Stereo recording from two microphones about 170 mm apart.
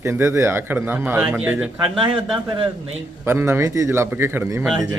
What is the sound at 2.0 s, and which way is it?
Speech, 30° right (ahead or behind).